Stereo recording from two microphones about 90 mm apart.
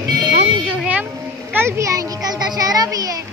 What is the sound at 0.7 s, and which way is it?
Vehicle, 15° right (ahead or behind).